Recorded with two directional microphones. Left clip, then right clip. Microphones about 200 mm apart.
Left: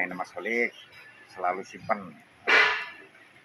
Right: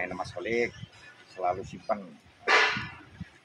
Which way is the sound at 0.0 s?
20° right (ahead or behind).